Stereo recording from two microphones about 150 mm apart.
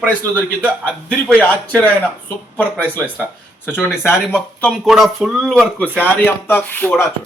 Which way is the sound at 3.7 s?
15° left (ahead or behind).